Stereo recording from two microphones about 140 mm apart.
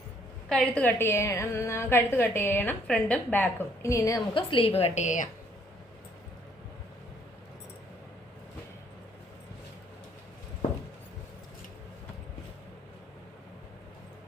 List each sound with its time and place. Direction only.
0.4 s a woman's voice: 5° left (ahead or behind); by 4.2 s 20° left (ahead or behind)
4.4 s a woman's voice: 40° left (ahead or behind); by 5.3 s 60° left (ahead or behind)